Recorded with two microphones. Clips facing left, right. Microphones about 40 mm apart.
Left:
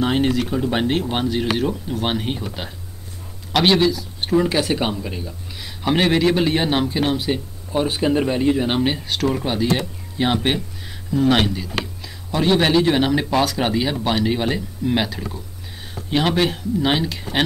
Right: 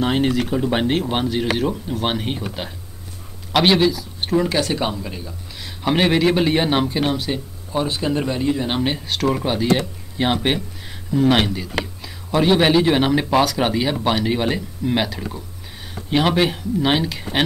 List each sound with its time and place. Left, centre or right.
0.0 s speech: centre
8.7 s speech: centre